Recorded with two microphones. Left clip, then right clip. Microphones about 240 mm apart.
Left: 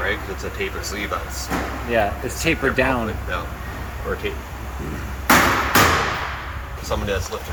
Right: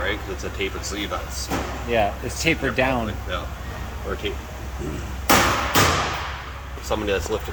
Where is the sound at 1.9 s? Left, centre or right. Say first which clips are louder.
Left 1 dB; centre.